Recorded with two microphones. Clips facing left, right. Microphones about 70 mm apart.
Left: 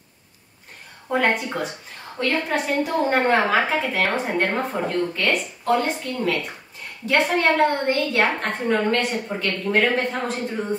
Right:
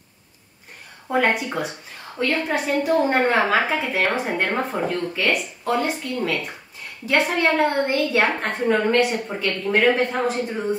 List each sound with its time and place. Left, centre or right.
1.0 s a woman's voice: centre